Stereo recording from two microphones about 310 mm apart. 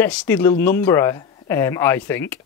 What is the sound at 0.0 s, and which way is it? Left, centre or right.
Speech, centre.